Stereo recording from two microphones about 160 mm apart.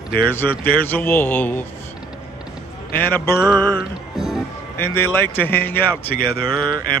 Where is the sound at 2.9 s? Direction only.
10° left (ahead or behind).